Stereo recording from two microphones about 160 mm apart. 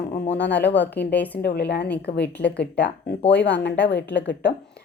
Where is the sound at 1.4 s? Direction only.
85° left.